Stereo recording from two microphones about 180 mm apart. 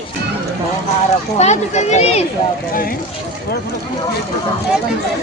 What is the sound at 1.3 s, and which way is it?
Speech, 40° left (ahead or behind).